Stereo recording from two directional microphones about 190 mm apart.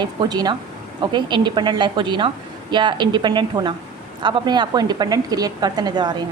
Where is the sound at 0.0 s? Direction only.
20° right (ahead or behind).